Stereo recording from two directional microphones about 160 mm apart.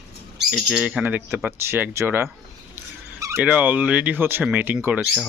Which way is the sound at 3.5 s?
10° right (ahead or behind).